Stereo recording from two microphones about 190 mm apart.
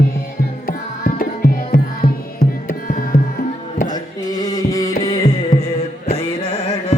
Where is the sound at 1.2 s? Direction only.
50° left (ahead or behind).